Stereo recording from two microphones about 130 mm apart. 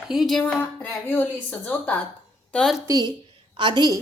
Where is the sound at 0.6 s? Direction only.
15° left (ahead or behind).